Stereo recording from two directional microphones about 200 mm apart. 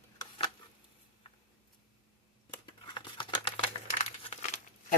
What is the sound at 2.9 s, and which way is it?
Crumpling, 25° left (ahead or behind).